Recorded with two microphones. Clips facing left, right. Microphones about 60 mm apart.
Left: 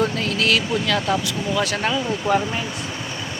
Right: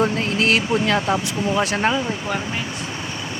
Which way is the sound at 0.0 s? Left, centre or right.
Right.